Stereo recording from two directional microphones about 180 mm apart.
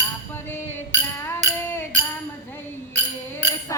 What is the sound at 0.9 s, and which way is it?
Music, 15° left (ahead or behind).